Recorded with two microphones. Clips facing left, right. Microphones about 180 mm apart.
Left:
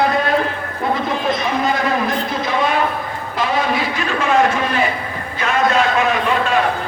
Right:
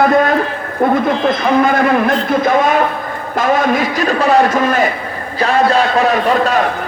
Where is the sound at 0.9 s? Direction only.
55° right (ahead or behind).